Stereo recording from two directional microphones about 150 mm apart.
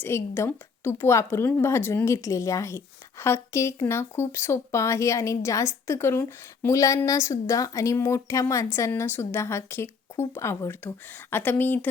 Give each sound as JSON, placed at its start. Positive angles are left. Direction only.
{"t": 0.0, "sound": "a woman's voice", "side_deg": 15}